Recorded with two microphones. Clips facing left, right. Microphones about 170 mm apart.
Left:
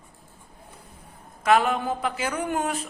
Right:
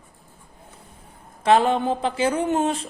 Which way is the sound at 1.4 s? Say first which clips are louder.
Right 3 dB; 30° right (ahead or behind).